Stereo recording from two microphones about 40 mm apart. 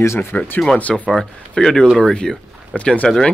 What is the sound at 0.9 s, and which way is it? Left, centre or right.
Speech, centre.